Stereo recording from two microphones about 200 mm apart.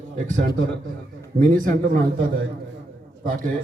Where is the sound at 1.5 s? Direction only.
40° right (ahead or behind).